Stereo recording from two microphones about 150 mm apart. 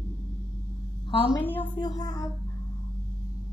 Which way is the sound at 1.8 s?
25° left (ahead or behind).